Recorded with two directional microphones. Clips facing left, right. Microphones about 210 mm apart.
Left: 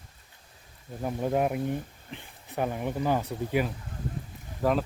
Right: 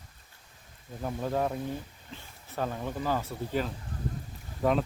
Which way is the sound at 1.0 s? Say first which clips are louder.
Left 3 dB; 15° left (ahead or behind).